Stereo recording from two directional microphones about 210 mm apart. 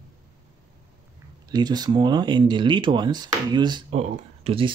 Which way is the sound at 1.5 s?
20° right (ahead or behind).